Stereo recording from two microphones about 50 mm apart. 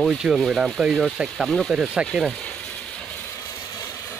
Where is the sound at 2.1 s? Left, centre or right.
Centre.